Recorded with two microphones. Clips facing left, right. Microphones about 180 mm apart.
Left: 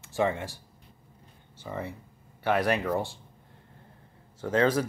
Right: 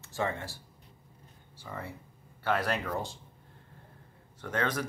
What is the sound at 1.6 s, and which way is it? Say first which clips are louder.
Speech: left 5 dB; 20° left (ahead or behind).